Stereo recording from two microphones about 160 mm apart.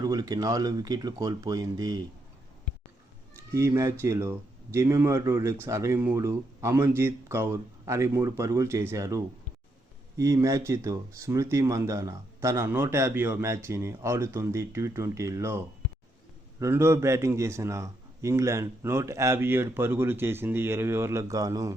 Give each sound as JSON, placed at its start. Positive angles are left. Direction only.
{"t": 0.0, "sound": "speech", "side_deg": -25}
{"t": 3.5, "sound": "speech", "side_deg": -15}